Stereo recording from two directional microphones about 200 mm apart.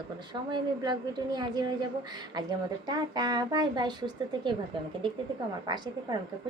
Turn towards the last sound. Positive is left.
turn(degrees=-20)  # may be behind; listen again after turning